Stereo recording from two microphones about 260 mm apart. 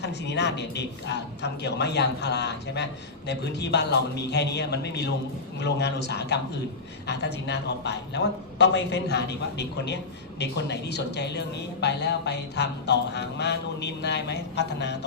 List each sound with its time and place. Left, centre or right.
0.0 s speech: left